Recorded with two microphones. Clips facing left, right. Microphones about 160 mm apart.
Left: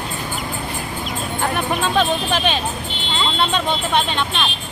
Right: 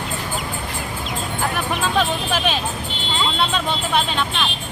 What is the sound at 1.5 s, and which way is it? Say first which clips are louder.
Music: left 2 dB; centre (ahead or behind).